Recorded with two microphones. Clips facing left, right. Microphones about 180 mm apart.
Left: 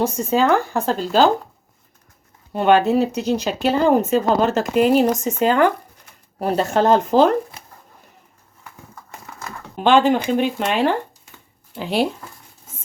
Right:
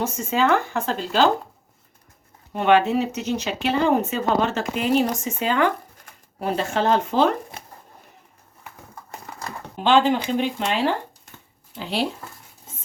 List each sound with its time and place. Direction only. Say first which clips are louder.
0.0 s speech: left 4 dB; 35° left (ahead or behind)
2.5 s speech: left 3 dB; 35° left (ahead or behind)
9.8 s speech: left 3 dB; 50° left (ahead or behind)